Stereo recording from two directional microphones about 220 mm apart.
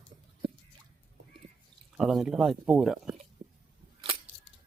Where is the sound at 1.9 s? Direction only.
Centre (ahead or behind).